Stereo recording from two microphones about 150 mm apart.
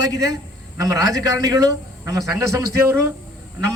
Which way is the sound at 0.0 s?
25° right (ahead or behind).